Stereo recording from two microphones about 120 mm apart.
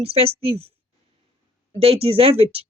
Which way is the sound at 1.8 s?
55° right (ahead or behind).